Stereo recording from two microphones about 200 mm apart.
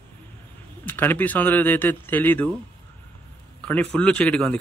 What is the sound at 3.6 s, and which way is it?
Speech, 5° left (ahead or behind).